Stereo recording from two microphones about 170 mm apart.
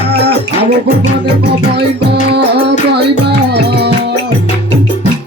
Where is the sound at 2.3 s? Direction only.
75° right (ahead or behind).